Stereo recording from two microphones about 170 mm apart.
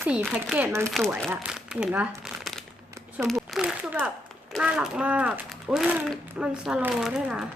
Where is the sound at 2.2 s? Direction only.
Centre (ahead or behind).